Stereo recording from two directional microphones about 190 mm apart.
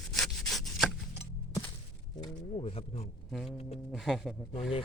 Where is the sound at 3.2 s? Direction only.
Centre (ahead or behind).